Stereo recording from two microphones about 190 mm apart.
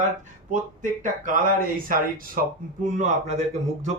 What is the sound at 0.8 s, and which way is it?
Speech, 45° right (ahead or behind).